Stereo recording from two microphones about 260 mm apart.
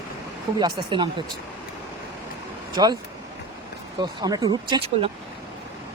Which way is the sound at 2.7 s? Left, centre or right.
Centre.